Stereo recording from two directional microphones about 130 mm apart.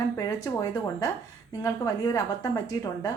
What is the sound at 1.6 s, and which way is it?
A woman's voice, 30° left (ahead or behind).